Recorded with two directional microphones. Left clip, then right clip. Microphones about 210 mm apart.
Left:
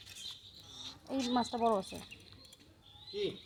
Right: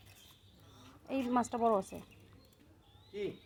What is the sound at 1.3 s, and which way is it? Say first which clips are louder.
Speech: right 1 dB; 5° right (ahead or behind).